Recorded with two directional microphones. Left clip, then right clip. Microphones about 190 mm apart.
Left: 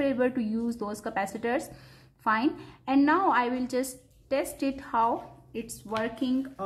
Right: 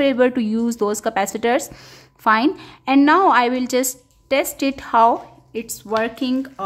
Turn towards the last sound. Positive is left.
turn(degrees=-40)  # may be behind; listen again after turning